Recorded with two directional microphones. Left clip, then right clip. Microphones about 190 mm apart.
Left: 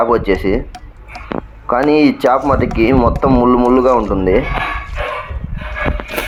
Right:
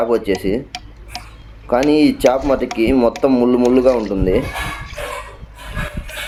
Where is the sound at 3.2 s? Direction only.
Centre (ahead or behind).